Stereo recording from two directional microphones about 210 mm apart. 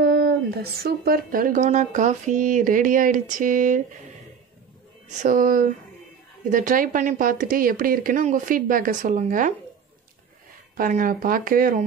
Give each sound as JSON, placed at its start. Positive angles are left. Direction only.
{"t": 0.0, "sound": "speech", "side_deg": -50}
{"t": 5.2, "sound": "speech", "side_deg": -40}
{"t": 10.8, "sound": "speech", "side_deg": -40}